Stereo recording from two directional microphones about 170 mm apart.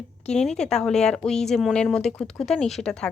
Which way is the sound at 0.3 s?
5° left (ahead or behind).